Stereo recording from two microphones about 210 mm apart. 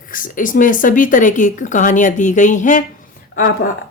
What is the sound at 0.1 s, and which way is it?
Speech, 40° left (ahead or behind).